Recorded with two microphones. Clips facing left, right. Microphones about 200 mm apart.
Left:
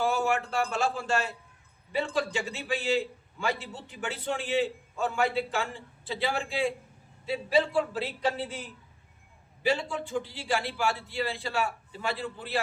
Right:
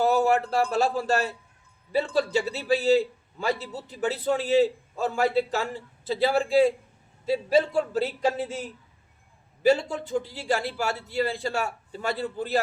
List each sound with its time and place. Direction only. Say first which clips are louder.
0.0 s a man's voice: right 6 dB; 40° right (ahead or behind)
9.6 s a man's voice: right 7 dB; 40° right (ahead or behind)